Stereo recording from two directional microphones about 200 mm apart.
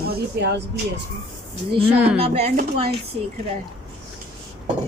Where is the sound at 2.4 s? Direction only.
35° right (ahead or behind).